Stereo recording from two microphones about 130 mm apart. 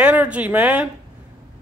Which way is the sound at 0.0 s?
10° right (ahead or behind).